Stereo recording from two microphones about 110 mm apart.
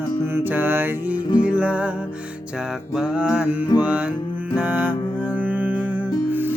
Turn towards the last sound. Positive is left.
turn(degrees=-15)  # may be behind; listen again after turning